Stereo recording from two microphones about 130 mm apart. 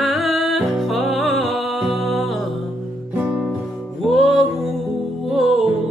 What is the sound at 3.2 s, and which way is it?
Music, 10° right (ahead or behind).